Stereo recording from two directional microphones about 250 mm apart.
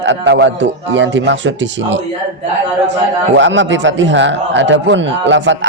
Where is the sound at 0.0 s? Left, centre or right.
Right.